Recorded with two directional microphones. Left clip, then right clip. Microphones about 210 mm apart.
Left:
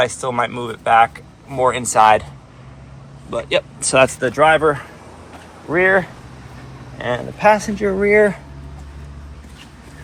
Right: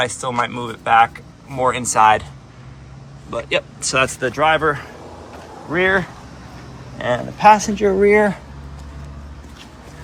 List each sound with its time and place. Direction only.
0.0 s speech: 5° right (ahead or behind)
3.2 s speech: 10° right (ahead or behind)
4.4 s speech: 15° left (ahead or behind)
5.8 s speech: 5° right (ahead or behind)
7.6 s speech: centre (ahead or behind)